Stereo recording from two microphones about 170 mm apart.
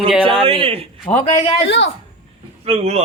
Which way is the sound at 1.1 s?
25° left (ahead or behind).